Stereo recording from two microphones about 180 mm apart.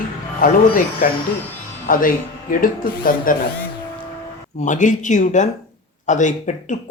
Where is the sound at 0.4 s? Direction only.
50° left (ahead or behind).